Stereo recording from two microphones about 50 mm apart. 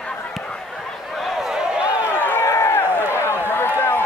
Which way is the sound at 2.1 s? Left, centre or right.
Left.